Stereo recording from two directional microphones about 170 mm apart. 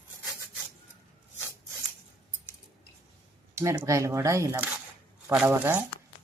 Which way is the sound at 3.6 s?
15° right (ahead or behind).